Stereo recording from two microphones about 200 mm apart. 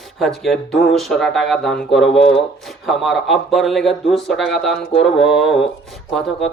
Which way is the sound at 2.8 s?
Centre (ahead or behind).